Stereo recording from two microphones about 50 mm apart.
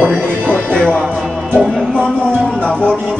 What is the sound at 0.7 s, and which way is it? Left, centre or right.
Speech, left.